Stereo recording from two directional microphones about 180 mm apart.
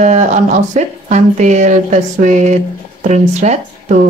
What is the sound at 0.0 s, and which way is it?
Speech, 45° right (ahead or behind).